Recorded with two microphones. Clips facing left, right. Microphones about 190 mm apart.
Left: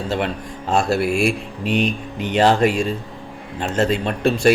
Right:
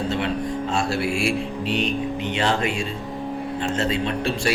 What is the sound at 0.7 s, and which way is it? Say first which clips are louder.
A man's voice: left 8 dB; 50° left (ahead or behind).